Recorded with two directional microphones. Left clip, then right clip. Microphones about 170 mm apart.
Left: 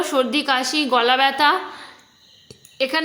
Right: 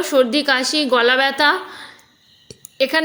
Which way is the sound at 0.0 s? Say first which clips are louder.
Right 4 dB; 15° right (ahead or behind).